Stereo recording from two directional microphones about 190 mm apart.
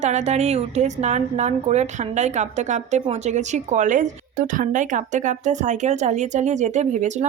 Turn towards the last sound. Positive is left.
turn(degrees=-40)  # may be behind; listen again after turning